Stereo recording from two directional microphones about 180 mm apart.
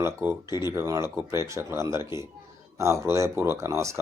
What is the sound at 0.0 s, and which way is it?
Speech, 15° right (ahead or behind).